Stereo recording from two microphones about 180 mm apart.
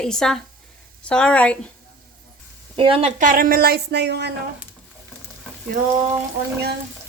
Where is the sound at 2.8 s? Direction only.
30° right (ahead or behind); by 4.3 s 70° right (ahead or behind).